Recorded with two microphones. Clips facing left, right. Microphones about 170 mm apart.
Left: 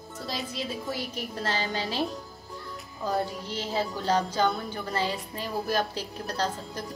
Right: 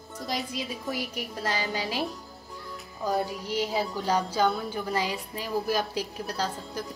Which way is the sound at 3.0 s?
10° right (ahead or behind).